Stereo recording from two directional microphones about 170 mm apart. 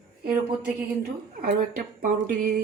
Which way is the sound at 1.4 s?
55° right (ahead or behind).